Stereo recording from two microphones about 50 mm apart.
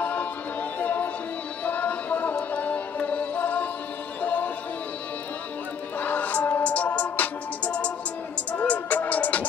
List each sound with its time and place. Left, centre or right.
0.0 s music: left
5.9 s music: left